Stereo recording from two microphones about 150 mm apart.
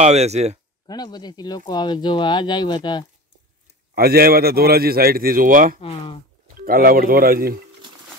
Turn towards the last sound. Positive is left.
turn(degrees=-80)